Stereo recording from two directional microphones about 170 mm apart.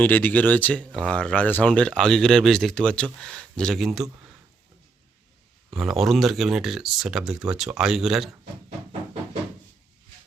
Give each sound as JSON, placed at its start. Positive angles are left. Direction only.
{"t": 0.0, "sound": "speech", "side_deg": 10}
{"t": 5.7, "sound": "speech", "side_deg": 0}